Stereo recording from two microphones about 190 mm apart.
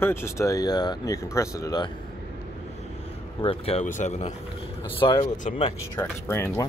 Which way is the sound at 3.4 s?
30° left (ahead or behind).